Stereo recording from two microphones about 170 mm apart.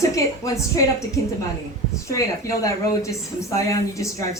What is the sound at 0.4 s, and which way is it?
Speech, 20° left (ahead or behind).